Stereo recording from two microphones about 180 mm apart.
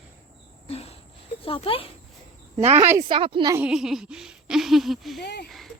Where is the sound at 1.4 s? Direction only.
30° left (ahead or behind).